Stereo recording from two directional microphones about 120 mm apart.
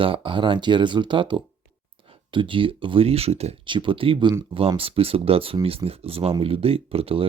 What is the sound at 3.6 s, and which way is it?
Speech, 45° right (ahead or behind).